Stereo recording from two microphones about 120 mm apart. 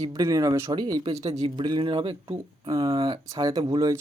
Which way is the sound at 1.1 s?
60° right (ahead or behind).